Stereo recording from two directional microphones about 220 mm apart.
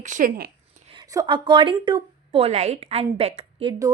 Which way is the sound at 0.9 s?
20° right (ahead or behind).